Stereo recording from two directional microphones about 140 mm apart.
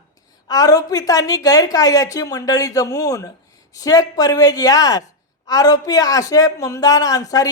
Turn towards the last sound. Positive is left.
turn(degrees=25)  # may be behind; listen again after turning